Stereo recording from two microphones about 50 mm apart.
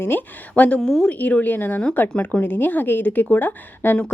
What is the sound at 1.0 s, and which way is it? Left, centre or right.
Speech, left.